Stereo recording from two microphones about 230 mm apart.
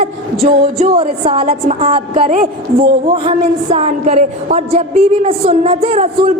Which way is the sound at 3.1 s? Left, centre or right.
Right.